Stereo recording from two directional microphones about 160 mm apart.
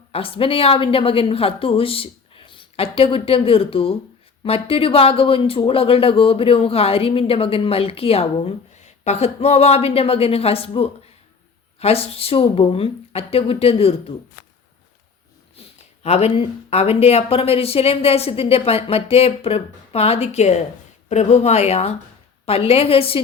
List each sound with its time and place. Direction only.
0.1 s speech: 35° left (ahead or behind)
16.0 s speech: 40° left (ahead or behind)